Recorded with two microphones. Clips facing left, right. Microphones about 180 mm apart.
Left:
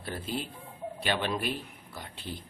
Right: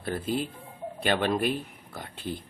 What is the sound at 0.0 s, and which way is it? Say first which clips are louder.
Speech: right 6 dB; 50° right (ahead or behind).